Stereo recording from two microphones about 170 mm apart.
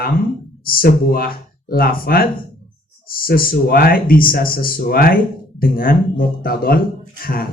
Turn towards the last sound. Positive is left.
turn(degrees=60)  # may be behind; listen again after turning